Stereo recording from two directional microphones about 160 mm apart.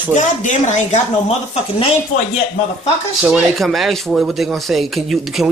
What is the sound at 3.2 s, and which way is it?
Speech, centre (ahead or behind).